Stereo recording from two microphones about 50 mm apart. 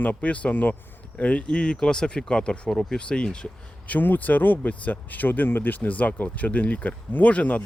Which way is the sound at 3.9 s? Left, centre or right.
Left.